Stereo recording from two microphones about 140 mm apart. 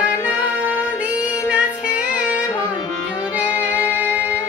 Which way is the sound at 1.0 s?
10° right (ahead or behind).